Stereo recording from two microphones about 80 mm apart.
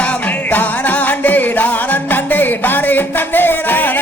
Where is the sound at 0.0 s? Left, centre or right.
Centre.